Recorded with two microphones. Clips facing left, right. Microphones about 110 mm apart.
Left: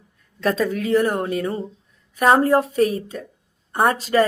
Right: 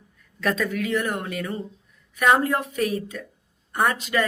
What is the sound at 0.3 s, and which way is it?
A woman's voice, 30° left (ahead or behind).